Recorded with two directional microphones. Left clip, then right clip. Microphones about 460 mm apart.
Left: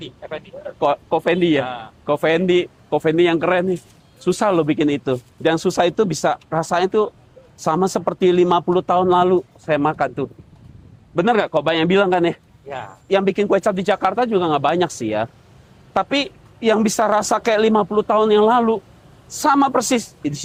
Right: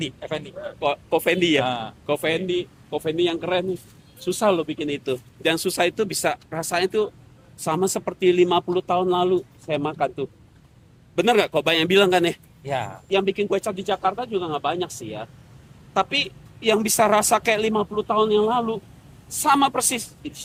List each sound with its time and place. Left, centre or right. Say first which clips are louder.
0.0 s speech: right 2 dB; right
1.1 s speech: left 3 dB; centre
1.6 s a man's voice: right 2 dB; right
2.0 s speech: left 6 dB; centre
2.3 s a woman's voice: left 8 dB; left; by 12.4 s centre
12.6 s speech: right 4 dB; right
13.1 s a woman's voice: left 6 dB; left